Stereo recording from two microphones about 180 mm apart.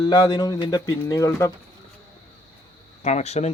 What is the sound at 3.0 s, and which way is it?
Speech, 40° left (ahead or behind).